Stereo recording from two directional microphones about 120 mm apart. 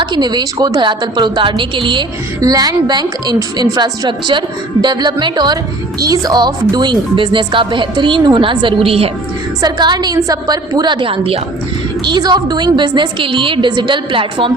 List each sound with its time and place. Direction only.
0.0 s a woman's voice: 35° right (ahead or behind)
2.4 s a woman's voice: 30° right (ahead or behind); by 9.0 s 50° right (ahead or behind)
9.6 s a woman's voice: 35° right (ahead or behind); by 11.3 s 50° right (ahead or behind)
12.0 s a woman's voice: 35° right (ahead or behind)